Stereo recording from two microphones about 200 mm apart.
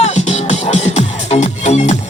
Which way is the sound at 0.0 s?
35° left (ahead or behind).